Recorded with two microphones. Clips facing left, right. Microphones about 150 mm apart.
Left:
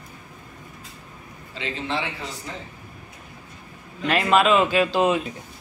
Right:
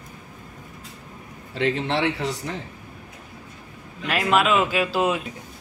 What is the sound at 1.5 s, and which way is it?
Speech, 65° right (ahead or behind).